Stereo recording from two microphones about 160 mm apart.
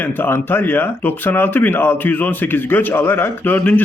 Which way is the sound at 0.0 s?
15° left (ahead or behind).